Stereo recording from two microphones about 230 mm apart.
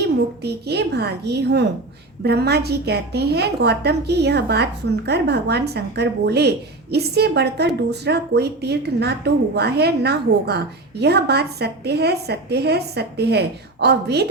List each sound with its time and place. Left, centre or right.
0.4 s a woman's voice: right